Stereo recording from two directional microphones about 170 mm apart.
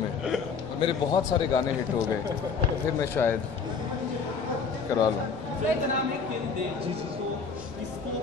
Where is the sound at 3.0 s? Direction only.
10° left (ahead or behind).